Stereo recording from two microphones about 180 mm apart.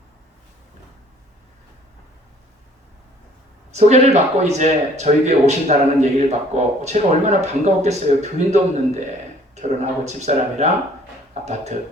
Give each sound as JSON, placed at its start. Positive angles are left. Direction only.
{"t": 3.7, "sound": "a man's voice", "side_deg": -40}